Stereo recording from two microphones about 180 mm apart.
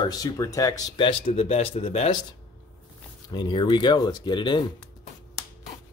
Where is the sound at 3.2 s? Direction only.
25° left (ahead or behind).